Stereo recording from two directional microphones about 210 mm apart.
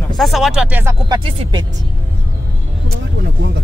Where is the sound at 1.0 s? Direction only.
20° right (ahead or behind).